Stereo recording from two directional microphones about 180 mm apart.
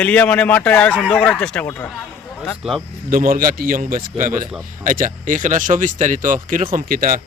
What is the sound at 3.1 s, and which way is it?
Speech, 50° right (ahead or behind).